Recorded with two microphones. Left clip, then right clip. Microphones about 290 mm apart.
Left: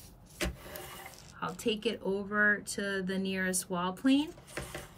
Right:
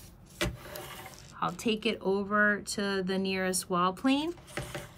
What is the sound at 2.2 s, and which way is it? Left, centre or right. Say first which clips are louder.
Speech: right 1 dB; right.